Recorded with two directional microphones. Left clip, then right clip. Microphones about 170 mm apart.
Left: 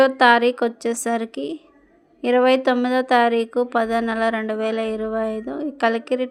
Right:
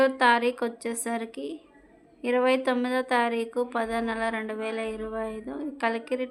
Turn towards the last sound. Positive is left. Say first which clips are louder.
# left 8 dB
turn(degrees=35)  # may be behind; listen again after turning